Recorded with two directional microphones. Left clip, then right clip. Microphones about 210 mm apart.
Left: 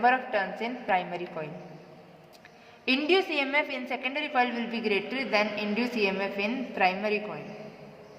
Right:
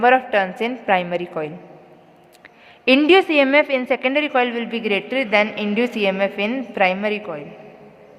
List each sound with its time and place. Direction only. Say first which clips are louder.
0.0 s a woman's voice: right 9 dB; 45° right (ahead or behind)
2.8 s a woman's voice: right 11 dB; 50° right (ahead or behind)